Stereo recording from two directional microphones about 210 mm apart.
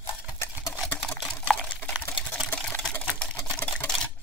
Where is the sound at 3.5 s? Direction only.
5° left (ahead or behind).